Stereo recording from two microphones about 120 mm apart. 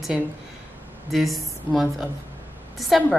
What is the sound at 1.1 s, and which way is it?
A woman's voice, centre (ahead or behind).